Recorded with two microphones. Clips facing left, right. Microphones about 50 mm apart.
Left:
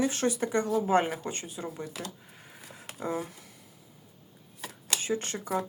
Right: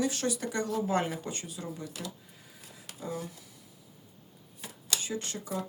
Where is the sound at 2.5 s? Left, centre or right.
Left.